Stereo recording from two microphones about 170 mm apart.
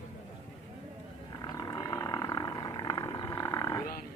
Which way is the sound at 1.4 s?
25° left (ahead or behind).